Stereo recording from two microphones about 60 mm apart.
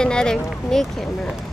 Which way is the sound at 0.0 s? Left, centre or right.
Centre.